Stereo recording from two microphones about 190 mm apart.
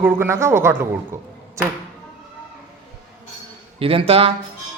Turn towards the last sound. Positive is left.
turn(degrees=-30)  # may be behind; listen again after turning